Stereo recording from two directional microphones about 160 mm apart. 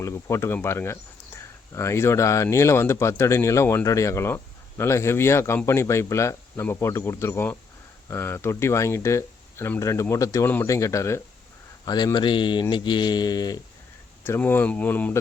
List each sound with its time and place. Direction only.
0.0 s speech: 15° left (ahead or behind)
14.3 s speech: 15° left (ahead or behind)